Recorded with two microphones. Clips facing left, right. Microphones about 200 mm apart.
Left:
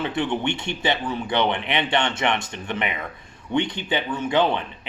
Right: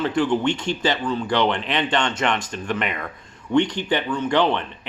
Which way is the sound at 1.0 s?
20° left (ahead or behind).